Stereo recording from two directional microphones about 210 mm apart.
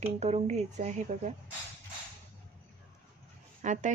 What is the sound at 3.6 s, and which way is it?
Speech, 35° right (ahead or behind).